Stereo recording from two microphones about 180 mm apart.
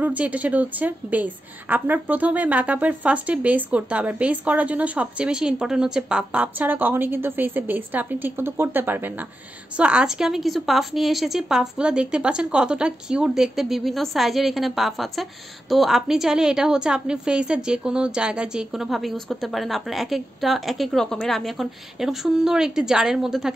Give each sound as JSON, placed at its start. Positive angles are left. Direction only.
{"t": 0.0, "sound": "a woman's voice", "side_deg": -10}